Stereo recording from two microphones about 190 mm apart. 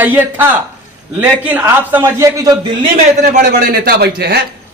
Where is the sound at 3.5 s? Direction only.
60° right (ahead or behind).